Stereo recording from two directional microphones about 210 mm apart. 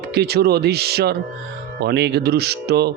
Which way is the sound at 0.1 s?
50° right (ahead or behind).